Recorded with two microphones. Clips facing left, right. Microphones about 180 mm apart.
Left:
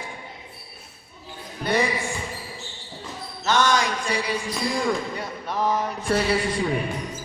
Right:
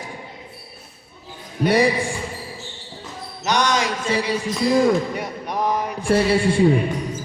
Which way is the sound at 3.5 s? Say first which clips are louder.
Right 1 dB; 15° right (ahead or behind).